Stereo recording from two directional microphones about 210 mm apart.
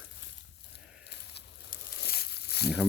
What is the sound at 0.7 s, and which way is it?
Tearing, 50° left (ahead or behind).